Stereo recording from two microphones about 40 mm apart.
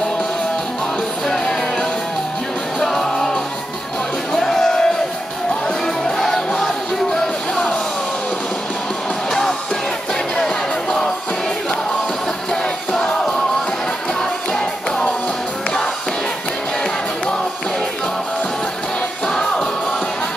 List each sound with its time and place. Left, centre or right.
1.2 s music: centre
6.0 s music: centre
9.3 s music: centre
14.5 s music: centre
19.2 s music: centre